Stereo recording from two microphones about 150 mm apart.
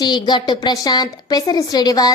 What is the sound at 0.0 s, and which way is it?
A woman's voice, 30° left (ahead or behind).